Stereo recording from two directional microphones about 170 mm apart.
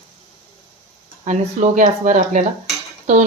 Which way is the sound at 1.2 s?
45° right (ahead or behind).